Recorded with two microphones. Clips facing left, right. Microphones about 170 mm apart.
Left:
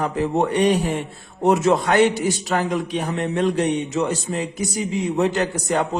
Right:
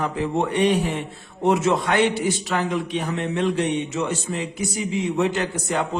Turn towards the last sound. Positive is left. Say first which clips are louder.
# left 3 dB
turn(degrees=40)  # may be behind; listen again after turning